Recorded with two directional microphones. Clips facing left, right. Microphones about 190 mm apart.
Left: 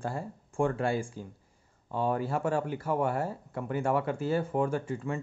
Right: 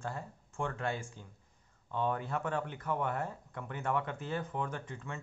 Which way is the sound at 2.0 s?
10° left (ahead or behind).